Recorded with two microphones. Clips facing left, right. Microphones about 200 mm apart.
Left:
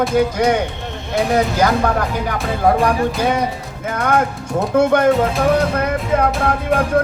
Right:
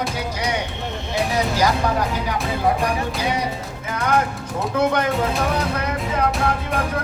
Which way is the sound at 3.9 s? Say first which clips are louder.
Left 3 dB; 50° left (ahead or behind).